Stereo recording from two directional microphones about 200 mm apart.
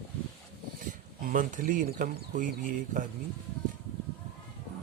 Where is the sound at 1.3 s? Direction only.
40° right (ahead or behind).